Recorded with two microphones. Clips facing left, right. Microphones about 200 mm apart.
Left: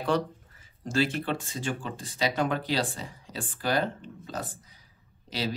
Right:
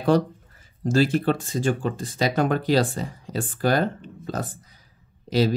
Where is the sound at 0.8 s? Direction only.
40° right (ahead or behind).